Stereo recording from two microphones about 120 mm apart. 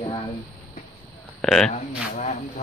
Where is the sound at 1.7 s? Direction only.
90° left.